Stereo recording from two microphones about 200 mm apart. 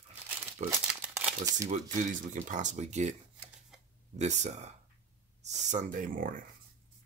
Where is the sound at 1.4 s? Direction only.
20° right (ahead or behind).